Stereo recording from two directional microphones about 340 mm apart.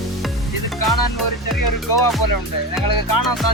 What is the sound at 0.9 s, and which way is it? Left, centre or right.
Music, left.